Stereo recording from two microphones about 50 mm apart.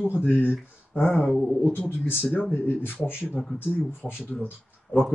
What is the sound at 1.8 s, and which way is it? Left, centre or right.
Speech, left.